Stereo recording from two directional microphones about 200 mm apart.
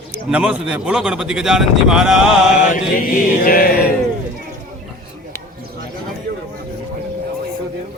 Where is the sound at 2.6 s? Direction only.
40° left (ahead or behind).